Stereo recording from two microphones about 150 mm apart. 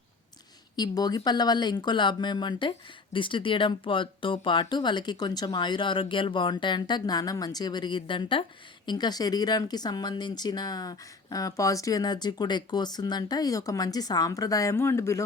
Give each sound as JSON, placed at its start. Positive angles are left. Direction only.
{"t": 0.8, "sound": "speech", "side_deg": 25}